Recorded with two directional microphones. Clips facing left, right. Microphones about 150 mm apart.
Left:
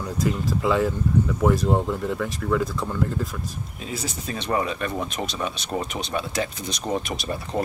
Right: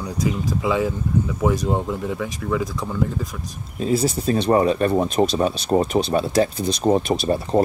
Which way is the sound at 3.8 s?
35° right (ahead or behind).